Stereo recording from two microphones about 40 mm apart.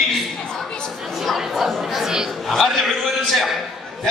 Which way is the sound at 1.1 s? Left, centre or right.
Centre.